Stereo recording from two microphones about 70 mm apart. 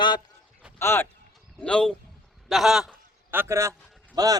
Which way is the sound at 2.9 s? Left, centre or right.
Right.